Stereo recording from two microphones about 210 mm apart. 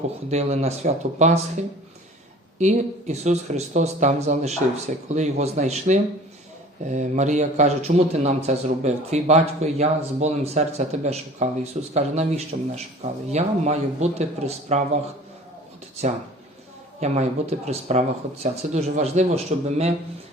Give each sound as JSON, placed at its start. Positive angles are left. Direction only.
{"t": 0.3, "sound": "a man's voice", "side_deg": -30}
{"t": 17.0, "sound": "a man's voice", "side_deg": -30}